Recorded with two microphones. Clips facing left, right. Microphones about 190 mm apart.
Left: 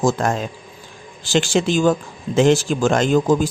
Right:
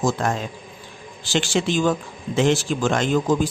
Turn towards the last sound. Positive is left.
turn(degrees=45)  # may be behind; listen again after turning